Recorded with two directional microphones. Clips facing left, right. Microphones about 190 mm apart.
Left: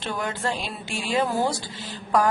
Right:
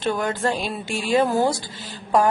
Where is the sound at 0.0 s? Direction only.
50° right (ahead or behind).